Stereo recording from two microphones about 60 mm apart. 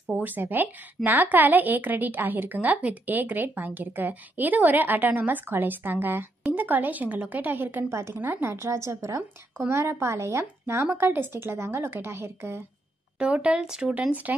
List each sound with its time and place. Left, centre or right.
0.2 s a woman's voice: right
7.9 s a woman's voice: right
8.6 s a woman's voice: right
10.9 s a woman's voice: right
13.2 s speech: centre